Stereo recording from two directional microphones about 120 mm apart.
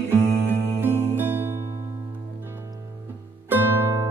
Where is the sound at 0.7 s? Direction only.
20° right (ahead or behind).